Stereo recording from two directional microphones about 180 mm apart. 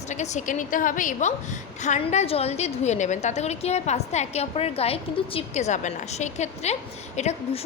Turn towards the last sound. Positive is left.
turn(degrees=40)  # may be behind; listen again after turning